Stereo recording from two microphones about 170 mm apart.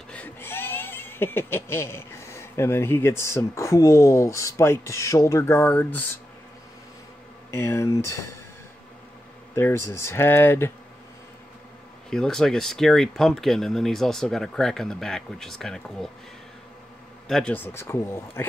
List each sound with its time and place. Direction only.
0.1 s speech: 10° left (ahead or behind)
7.5 s speech: 15° left (ahead or behind)
9.6 s speech: 15° left (ahead or behind)
12.1 s speech: 5° left (ahead or behind)
17.3 s speech: 5° left (ahead or behind)